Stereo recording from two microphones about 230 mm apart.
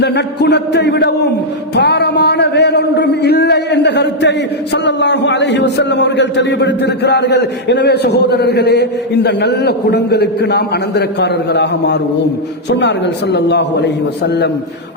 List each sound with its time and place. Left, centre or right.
0.0 s a man's voice: left
13.3 s a man's voice: left